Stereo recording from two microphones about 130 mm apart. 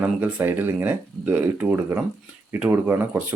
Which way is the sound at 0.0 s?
15° right (ahead or behind).